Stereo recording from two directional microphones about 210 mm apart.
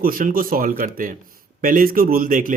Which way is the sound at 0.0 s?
40° right (ahead or behind).